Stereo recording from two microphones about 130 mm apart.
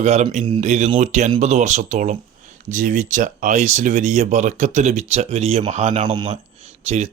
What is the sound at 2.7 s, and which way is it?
Speech, 80° right.